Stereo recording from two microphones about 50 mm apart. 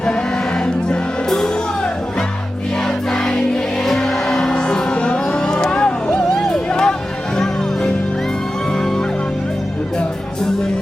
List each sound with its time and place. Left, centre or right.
0.6 s music: centre
2.8 s choir: centre
3.9 s music: centre
6.3 s music: centre
6.7 s music: centre